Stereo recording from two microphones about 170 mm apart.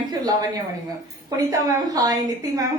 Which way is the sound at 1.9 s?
20° right (ahead or behind).